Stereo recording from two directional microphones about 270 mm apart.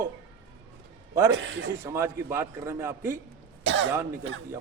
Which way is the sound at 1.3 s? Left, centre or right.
Right.